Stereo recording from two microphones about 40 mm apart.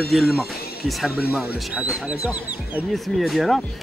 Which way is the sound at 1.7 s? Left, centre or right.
Right.